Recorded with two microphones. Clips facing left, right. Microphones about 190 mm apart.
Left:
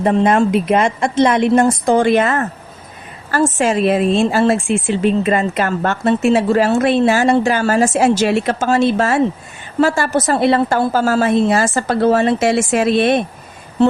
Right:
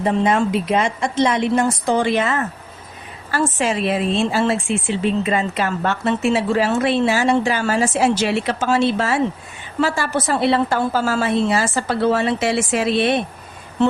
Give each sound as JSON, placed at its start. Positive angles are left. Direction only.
{"t": 0.0, "sound": "speech", "side_deg": 50}
{"t": 3.6, "sound": "speech", "side_deg": 45}